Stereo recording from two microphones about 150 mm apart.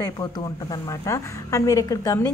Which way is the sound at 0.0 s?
25° left (ahead or behind).